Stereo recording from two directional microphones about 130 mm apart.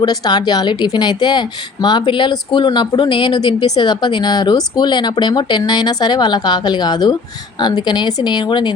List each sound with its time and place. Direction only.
0.0 s a woman's voice: 35° left (ahead or behind)